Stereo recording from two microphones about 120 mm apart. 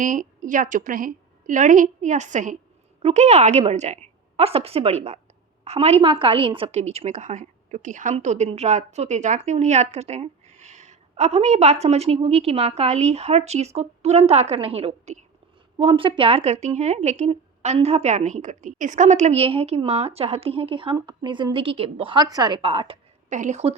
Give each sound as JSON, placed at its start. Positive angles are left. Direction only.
{"t": 0.0, "sound": "a woman's voice", "side_deg": -90}
{"t": 3.0, "sound": "a woman's voice", "side_deg": -65}
{"t": 6.0, "sound": "a woman's voice", "side_deg": -45}
{"t": 6.7, "sound": "a woman's voice", "side_deg": -65}
{"t": 15.8, "sound": "a woman's voice", "side_deg": -45}
{"t": 23.3, "sound": "a woman's voice", "side_deg": -85}